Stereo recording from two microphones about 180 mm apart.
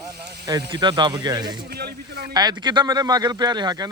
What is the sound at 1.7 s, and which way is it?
Speech, 60° right (ahead or behind).